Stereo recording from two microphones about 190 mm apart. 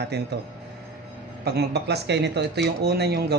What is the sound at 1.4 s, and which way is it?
A man's voice, 55° right (ahead or behind).